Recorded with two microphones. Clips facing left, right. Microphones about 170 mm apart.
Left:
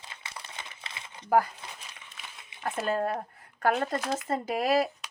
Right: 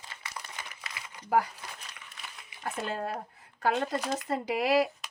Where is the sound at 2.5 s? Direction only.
25° left (ahead or behind).